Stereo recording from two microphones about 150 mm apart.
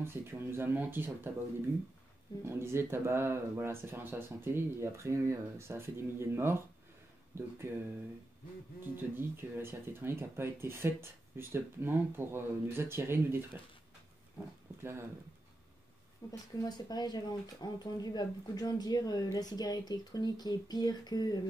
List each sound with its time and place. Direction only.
0.0 s speech: 15° right (ahead or behind)
2.4 s speech: 15° right (ahead or behind)
8.9 s speech: 15° right (ahead or behind)
14.8 s speech: 15° right (ahead or behind)
16.3 s speech: 25° left (ahead or behind)